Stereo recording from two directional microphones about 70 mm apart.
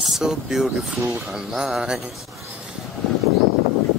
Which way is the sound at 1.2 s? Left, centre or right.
Centre.